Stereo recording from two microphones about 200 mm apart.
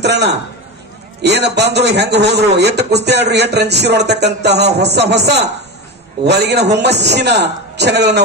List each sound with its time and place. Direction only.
0.0 s a man's voice: 55° right (ahead or behind)